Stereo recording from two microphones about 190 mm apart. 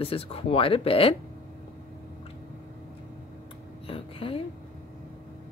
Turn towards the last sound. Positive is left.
turn(degrees=30)  # may be behind; listen again after turning